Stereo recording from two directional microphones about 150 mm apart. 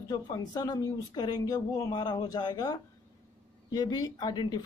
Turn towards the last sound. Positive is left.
turn(degrees=30)  # may be behind; listen again after turning